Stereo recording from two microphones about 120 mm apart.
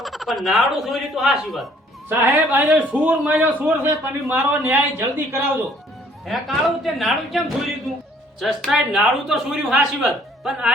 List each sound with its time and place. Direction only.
0.0 s speech: centre (ahead or behind)
2.0 s a man's voice: 20° right (ahead or behind)
6.2 s speech: centre (ahead or behind)